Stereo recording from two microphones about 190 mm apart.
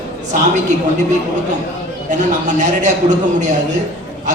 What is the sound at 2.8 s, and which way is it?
Speech, 40° right (ahead or behind).